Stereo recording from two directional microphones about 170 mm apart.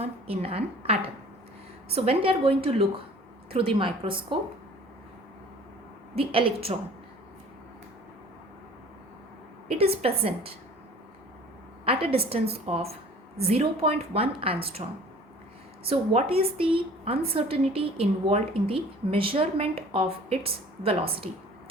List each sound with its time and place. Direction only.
0.0 s a woman's voice: 35° right (ahead or behind)
6.1 s a woman's voice: 35° right (ahead or behind)
9.6 s a woman's voice: 35° right (ahead or behind)
11.9 s a woman's voice: 35° right (ahead or behind)
15.9 s a woman's voice: 35° right (ahead or behind)